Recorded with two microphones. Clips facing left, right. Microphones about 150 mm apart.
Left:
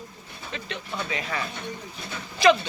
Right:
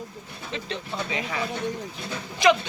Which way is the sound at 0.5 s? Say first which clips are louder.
Right 2 dB; 20° right (ahead or behind).